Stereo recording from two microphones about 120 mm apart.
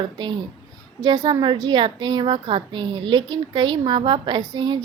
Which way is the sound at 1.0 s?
30° right (ahead or behind).